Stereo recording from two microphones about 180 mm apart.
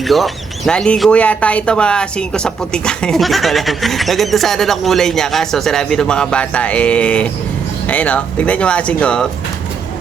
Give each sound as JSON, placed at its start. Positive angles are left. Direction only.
{"t": 0.1, "sound": "speech", "side_deg": 0}